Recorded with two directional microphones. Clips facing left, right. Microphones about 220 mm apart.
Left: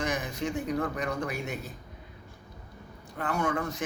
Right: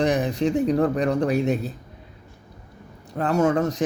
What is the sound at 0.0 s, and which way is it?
Speech, 35° right (ahead or behind).